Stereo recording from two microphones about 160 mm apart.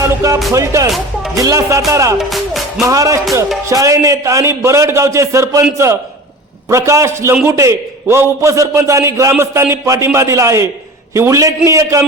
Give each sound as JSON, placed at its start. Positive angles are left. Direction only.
{"t": 0.0, "sound": "music", "side_deg": -20}
{"t": 0.5, "sound": "a man's voice", "side_deg": -20}
{"t": 2.1, "sound": "speech", "side_deg": 0}
{"t": 2.8, "sound": "a man's voice", "side_deg": -20}